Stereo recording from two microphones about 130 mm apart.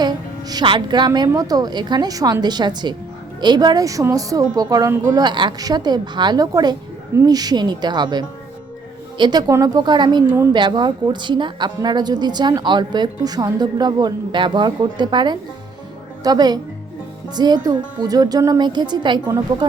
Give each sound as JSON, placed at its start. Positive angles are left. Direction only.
{"t": 0.0, "sound": "a woman's voice", "side_deg": -30}